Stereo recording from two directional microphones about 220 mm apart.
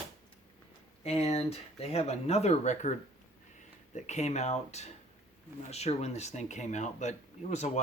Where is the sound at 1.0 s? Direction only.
30° left (ahead or behind).